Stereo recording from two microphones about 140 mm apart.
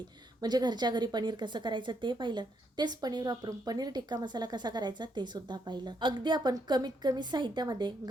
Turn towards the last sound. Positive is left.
turn(degrees=-30)  # may be behind; listen again after turning